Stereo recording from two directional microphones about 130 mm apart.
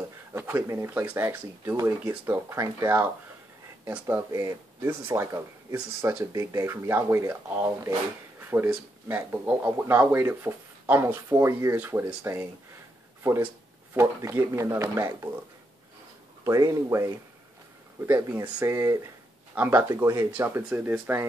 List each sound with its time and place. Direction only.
0.3 s speech: 20° right (ahead or behind)
16.4 s speech: 25° right (ahead or behind)